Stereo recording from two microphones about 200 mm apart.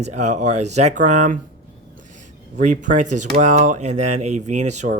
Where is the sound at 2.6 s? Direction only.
40° right (ahead or behind).